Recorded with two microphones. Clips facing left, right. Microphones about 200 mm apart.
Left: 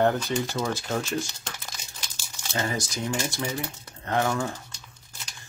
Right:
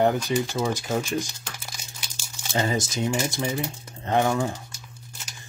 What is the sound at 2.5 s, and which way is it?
Speech, 20° right (ahead or behind).